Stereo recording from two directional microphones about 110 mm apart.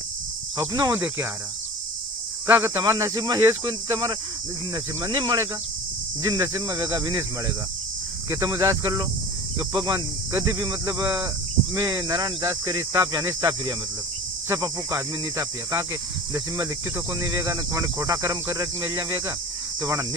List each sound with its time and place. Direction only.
0.6 s speech: 30° right (ahead or behind)
2.4 s speech: 20° right (ahead or behind)
3.2 s speech: 40° right (ahead or behind)
3.4 s speech: 30° right (ahead or behind)
17.2 s speech: 30° right (ahead or behind)